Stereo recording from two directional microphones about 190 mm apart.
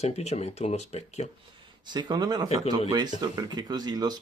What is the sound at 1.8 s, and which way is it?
Speech, 20° right (ahead or behind).